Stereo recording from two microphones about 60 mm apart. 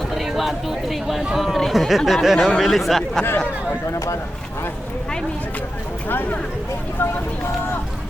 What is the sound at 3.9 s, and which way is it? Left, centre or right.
Speech, left.